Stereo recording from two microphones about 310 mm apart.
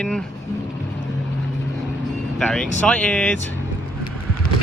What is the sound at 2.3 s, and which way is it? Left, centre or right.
Speech, centre.